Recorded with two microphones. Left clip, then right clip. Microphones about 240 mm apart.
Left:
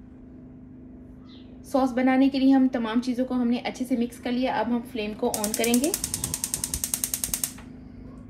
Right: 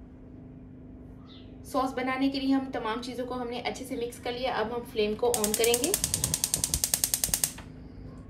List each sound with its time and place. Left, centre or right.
1.7 s a woman's voice: left
5.9 s ratchet: centre